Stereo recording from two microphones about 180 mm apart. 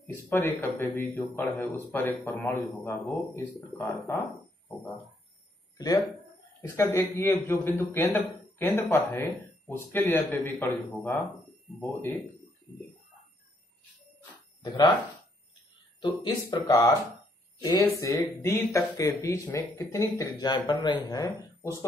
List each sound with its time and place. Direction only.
0.0 s a man's voice: 10° left (ahead or behind)
6.6 s a man's voice: 15° left (ahead or behind)
14.6 s speech: 25° left (ahead or behind)
16.0 s speech: 25° left (ahead or behind)
17.6 s a sound: 20° left (ahead or behind)
17.8 s a man's voice: 10° left (ahead or behind)